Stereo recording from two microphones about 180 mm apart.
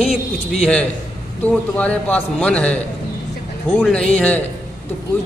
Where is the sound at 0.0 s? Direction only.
35° left (ahead or behind).